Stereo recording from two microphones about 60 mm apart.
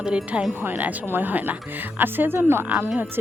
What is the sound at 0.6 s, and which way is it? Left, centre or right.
Speech, right.